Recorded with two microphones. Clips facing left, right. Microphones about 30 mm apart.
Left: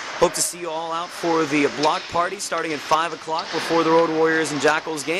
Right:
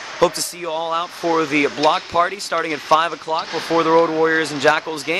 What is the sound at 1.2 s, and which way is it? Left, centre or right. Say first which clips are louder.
Speech: right 1 dB; centre.